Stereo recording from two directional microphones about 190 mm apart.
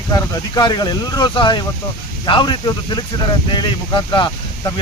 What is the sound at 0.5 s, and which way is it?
Speech, 20° left (ahead or behind).